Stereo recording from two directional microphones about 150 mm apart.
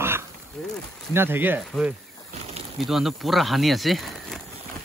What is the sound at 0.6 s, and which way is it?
Speech, centre (ahead or behind).